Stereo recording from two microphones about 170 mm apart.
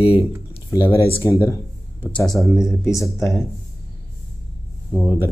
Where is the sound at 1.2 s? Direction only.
20° left (ahead or behind).